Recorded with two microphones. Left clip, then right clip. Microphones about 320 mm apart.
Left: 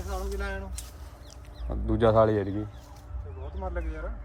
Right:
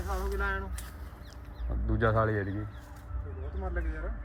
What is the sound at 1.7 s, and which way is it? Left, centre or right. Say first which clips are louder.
Speech: left 6 dB; centre.